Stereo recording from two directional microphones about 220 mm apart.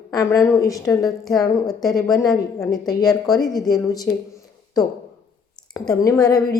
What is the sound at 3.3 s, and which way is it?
Speech, centre (ahead or behind).